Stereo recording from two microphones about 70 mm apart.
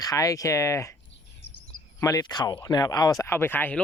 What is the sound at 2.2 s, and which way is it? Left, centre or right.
Speech, left.